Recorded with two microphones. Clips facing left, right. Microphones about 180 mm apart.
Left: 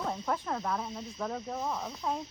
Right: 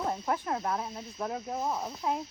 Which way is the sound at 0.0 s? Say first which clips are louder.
Right 2 dB; 5° right (ahead or behind).